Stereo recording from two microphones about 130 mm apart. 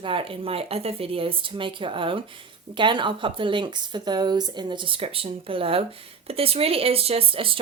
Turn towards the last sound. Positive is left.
turn(degrees=-45)  # may be behind; listen again after turning